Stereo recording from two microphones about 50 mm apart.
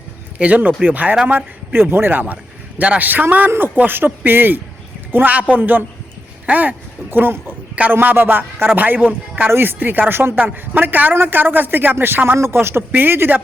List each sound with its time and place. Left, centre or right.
0.3 s a man's voice: right
1.3 s speech: right
2.2 s a man's voice: right
9.0 s speech: right
9.5 s a man's voice: right
12.4 s speech: right